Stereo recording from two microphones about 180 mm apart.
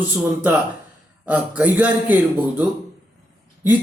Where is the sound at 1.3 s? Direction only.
10° right (ahead or behind).